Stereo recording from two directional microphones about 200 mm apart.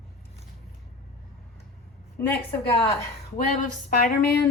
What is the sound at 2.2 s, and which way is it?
Speech, 10° left (ahead or behind).